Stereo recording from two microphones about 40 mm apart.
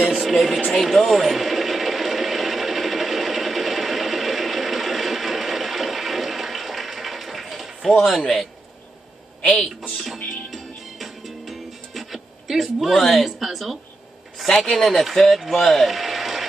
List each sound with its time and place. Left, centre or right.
0.1 s a sound: centre
0.7 s sewing machine: centre
9.4 s a woman's voice: left
10.5 s music: centre
14.9 s speech: centre